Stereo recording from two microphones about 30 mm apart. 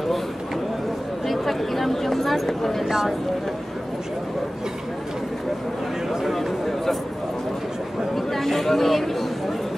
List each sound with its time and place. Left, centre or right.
1.2 s speech: centre
2.8 s speech: centre
6.3 s speech: centre
8.3 s speech: centre